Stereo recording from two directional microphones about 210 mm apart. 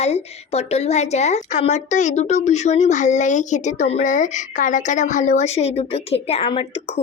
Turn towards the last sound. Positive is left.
turn(degrees=30)  # may be behind; listen again after turning